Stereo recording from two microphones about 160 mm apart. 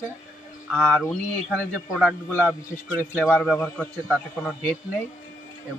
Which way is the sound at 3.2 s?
Centre (ahead or behind).